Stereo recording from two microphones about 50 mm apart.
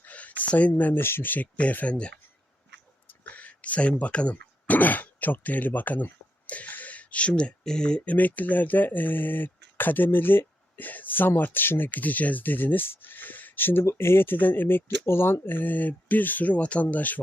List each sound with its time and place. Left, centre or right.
0.0 s a sound: left
0.7 s speech: left
1.7 s speech: left
6.5 s a sound: left
7.6 s speech: centre
8.0 s speech: left
13.8 s speech: left